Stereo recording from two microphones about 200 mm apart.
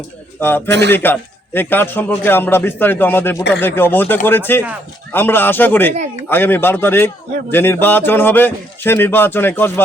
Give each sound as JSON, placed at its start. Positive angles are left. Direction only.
{"t": 0.3, "sound": "a man's voice", "side_deg": 10}